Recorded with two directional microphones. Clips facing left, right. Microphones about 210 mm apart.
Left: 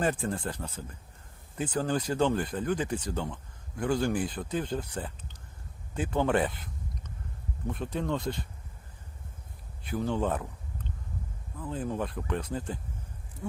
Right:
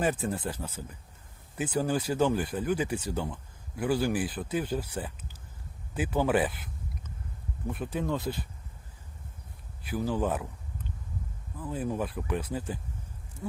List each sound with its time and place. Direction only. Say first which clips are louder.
0.0 s speech: even; 10° right (ahead or behind)
7.7 s speech: even; 5° right (ahead or behind)
9.8 s speech: even; 5° right (ahead or behind)
11.6 s speech: right 1 dB; 10° right (ahead or behind)